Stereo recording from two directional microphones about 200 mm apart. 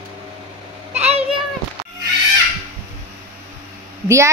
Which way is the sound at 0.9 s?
35° right (ahead or behind).